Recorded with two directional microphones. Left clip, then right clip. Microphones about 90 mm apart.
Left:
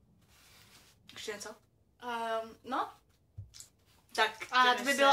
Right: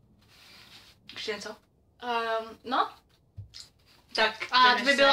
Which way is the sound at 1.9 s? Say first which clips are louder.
Right 6 dB; 20° right (ahead or behind).